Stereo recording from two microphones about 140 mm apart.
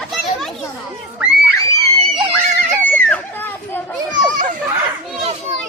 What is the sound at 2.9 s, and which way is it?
Children playing, 10° left (ahead or behind).